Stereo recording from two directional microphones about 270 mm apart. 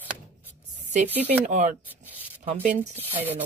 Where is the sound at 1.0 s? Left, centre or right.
Centre.